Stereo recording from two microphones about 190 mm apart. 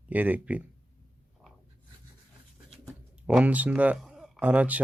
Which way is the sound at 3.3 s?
5° right (ahead or behind).